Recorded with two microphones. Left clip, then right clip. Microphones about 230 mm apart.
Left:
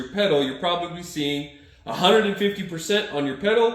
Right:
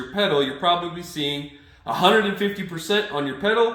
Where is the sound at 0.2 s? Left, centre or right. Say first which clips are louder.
Even; centre.